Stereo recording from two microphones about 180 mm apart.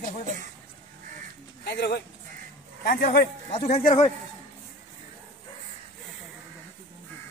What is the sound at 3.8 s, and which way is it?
Speech, 40° left (ahead or behind).